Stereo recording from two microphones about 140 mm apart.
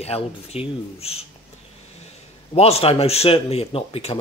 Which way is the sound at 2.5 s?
45° left (ahead or behind).